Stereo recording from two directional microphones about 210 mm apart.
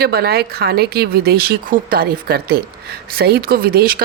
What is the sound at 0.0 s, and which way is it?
Speech, 50° right (ahead or behind).